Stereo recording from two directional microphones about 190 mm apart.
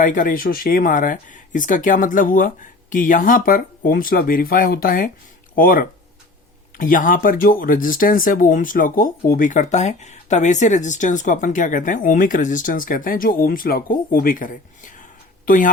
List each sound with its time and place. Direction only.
0.0 s speech: 45° left (ahead or behind)